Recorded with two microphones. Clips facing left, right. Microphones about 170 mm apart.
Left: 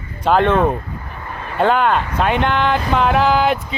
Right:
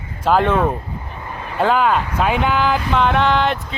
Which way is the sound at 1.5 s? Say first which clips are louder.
Left 1 dB; centre (ahead or behind).